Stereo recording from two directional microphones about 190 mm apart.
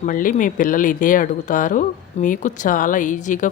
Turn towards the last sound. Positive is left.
turn(degrees=40)  # may be behind; listen again after turning